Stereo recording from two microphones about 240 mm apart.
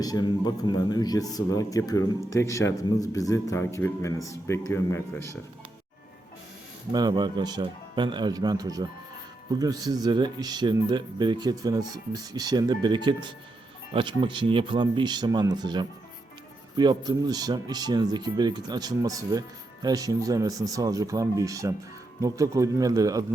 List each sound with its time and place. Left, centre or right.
0.0 s speech: centre
6.9 s speech: centre